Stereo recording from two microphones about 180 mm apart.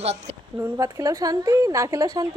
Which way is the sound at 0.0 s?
35° right (ahead or behind).